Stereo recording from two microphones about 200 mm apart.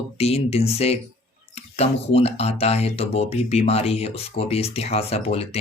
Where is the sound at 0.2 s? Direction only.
30° left (ahead or behind).